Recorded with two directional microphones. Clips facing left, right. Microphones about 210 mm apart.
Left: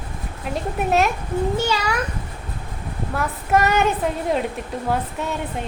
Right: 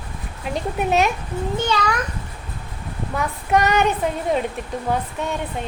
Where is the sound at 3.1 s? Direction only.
Centre (ahead or behind).